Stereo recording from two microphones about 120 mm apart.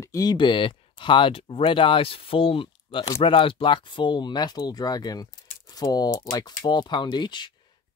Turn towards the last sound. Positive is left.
turn(degrees=40)  # may be behind; listen again after turning